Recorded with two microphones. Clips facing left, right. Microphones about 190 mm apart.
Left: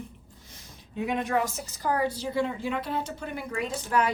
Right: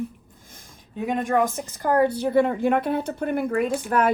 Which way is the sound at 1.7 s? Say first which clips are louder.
Right 7 dB; 55° right (ahead or behind).